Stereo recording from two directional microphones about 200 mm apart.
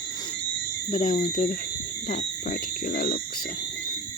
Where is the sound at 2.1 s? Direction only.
40° left (ahead or behind).